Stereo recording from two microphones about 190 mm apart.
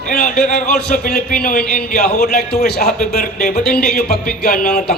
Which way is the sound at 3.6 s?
5° left (ahead or behind).